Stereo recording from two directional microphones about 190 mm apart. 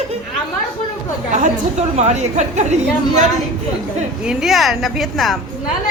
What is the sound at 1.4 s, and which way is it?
A woman's voice, 35° right (ahead or behind).